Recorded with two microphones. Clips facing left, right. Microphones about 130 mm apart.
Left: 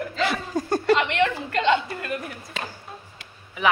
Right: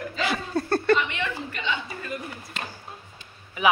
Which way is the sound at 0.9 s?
70° left (ahead or behind).